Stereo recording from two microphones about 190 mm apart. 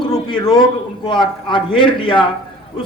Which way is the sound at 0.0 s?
25° left (ahead or behind).